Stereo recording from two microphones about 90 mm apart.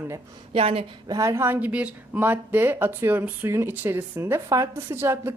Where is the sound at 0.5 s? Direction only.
90° right.